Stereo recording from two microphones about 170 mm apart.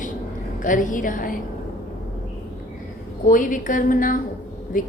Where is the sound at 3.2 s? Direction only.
50° left (ahead or behind).